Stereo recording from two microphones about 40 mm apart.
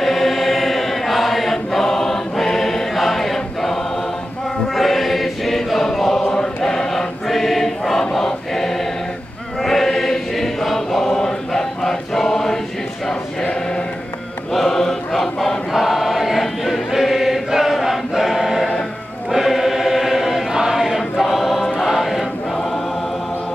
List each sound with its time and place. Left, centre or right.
0.0 s choir: centre
13.1 s choir: centre
14.5 s mantra: centre
15.1 s chant: centre
15.7 s choir: centre